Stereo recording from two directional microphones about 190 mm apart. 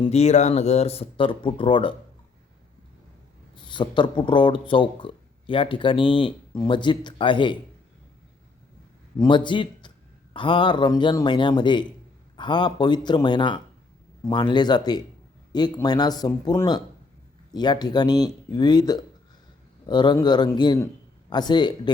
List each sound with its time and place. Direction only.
0.0 s speech: 35° left (ahead or behind)
3.5 s speech: 25° left (ahead or behind)
9.1 s speech: 20° left (ahead or behind)